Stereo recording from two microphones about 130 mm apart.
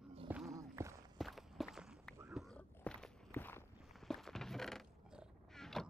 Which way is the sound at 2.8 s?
10° left (ahead or behind).